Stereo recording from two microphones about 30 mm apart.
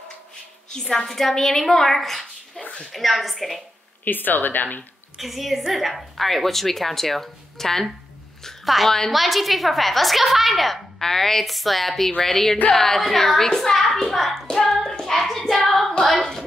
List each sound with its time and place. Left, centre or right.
0.7 s a woman's voice: centre
4.0 s speech: left
5.1 s a woman's voice: centre
8.6 s a woman's voice: centre
11.0 s a woman's voice: centre
11.4 s a woman's voice: centre
14.8 s hands: centre
15.1 s child singing: centre